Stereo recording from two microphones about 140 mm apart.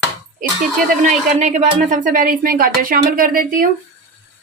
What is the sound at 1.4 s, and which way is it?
Speech, 65° right (ahead or behind).